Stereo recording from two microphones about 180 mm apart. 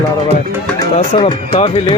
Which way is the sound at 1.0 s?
35° left (ahead or behind).